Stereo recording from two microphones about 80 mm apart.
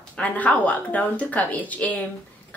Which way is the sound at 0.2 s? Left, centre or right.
Centre.